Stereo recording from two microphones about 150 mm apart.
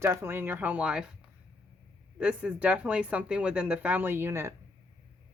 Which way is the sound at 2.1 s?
5° right (ahead or behind).